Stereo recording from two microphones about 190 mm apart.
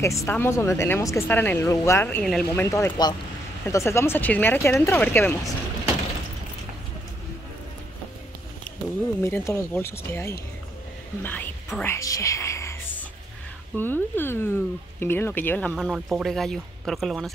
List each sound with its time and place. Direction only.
0.0 s speech: 15° left (ahead or behind)
9.2 s speech: 15° left (ahead or behind)
11.2 s whispering: 10° left (ahead or behind)
13.7 s speech: 10° left (ahead or behind)
15.7 s speech: centre (ahead or behind)